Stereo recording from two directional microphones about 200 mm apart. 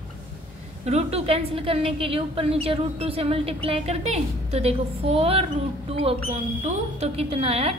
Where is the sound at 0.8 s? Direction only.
30° right (ahead or behind).